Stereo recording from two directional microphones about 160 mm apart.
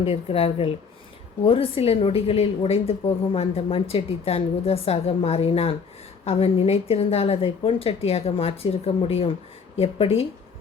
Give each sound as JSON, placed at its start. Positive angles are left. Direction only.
{"t": 0.0, "sound": "a woman's voice", "side_deg": 40}